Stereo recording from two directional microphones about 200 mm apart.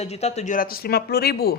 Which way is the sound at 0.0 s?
35° left (ahead or behind).